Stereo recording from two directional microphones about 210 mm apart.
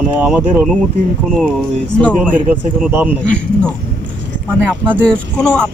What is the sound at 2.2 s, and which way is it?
Speech, 5° right (ahead or behind).